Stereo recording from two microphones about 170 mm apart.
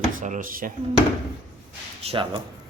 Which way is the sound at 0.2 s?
50° right (ahead or behind).